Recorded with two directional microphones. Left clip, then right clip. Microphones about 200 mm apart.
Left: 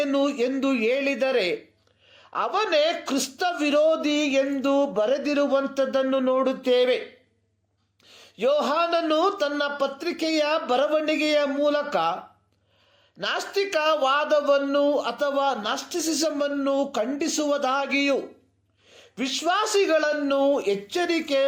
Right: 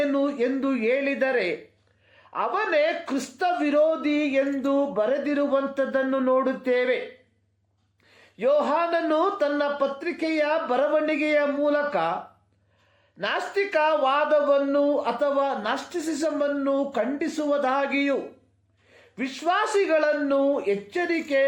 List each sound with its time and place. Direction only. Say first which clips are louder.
0.0 s speech: even; 30° left (ahead or behind)
8.4 s speech: even; 30° left (ahead or behind)
13.1 s speech: even; 30° left (ahead or behind)